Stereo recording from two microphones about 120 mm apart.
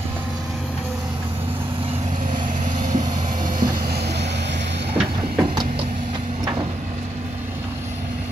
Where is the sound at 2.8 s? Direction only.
90° right.